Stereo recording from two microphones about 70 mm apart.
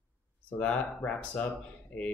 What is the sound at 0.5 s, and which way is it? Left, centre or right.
Speech, centre.